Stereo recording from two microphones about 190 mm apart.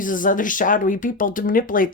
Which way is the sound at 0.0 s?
45° left (ahead or behind).